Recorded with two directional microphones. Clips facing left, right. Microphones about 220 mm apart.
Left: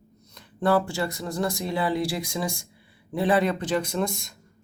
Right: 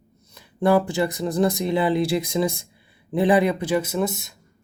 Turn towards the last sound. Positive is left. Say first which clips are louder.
# right 3 dB
turn(degrees=-5)  # may be behind; listen again after turning